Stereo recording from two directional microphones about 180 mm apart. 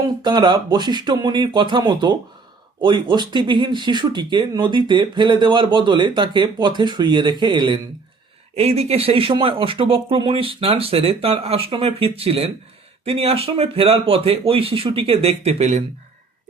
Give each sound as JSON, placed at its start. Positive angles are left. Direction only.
{"t": 0.2, "sound": "speech", "side_deg": -25}